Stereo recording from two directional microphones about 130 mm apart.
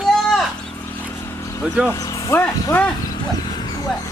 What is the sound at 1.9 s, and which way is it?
Speech, 25° left (ahead or behind).